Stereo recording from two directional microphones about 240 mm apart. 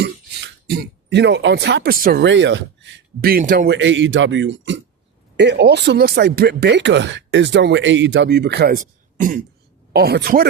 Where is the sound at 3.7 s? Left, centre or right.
Right.